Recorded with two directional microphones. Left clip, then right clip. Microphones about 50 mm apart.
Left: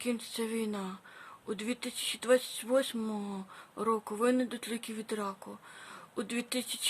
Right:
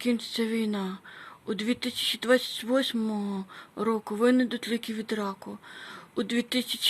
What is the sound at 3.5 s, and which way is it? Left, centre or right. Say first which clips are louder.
Speech: right 2 dB; right.